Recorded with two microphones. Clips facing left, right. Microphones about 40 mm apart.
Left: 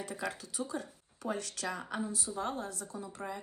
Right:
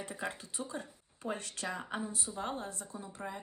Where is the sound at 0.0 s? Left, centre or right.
Right.